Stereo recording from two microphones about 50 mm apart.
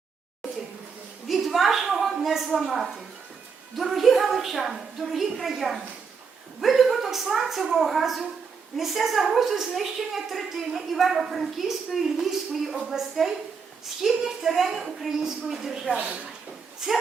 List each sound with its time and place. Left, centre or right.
1.3 s a woman's voice: centre
16.0 s speech: right